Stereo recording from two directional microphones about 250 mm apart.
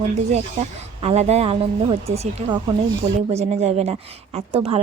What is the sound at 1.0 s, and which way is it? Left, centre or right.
A woman's voice, right.